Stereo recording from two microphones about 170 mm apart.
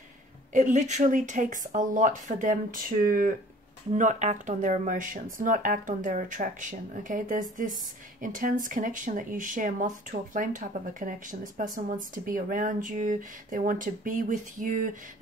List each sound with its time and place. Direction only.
0.5 s speech: 45° right (ahead or behind)